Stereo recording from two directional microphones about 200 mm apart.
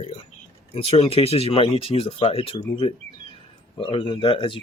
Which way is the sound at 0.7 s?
30° left (ahead or behind).